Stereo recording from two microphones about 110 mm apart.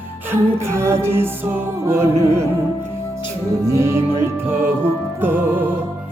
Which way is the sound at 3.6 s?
25° right (ahead or behind).